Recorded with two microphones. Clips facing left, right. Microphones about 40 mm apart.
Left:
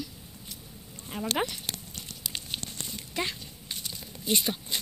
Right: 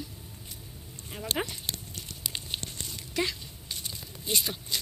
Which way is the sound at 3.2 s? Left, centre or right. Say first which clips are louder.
Right 2 dB; centre.